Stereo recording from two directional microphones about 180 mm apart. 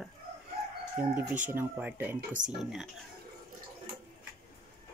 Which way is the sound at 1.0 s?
10° right (ahead or behind).